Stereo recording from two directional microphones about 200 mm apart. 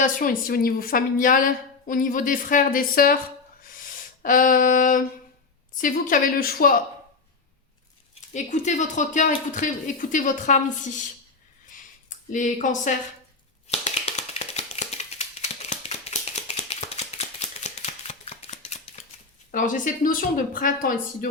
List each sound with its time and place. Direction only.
0.0 s a woman's voice: 45° left (ahead or behind)
4.2 s a woman's voice: 45° left (ahead or behind)
8.3 s speech: 35° left (ahead or behind)
11.7 s a sound: 40° left (ahead or behind)
13.7 s tap: 30° left (ahead or behind)
19.5 s a woman's voice: 40° left (ahead or behind)